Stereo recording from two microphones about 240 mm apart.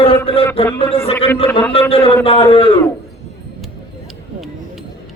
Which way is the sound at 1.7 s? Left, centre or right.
Left.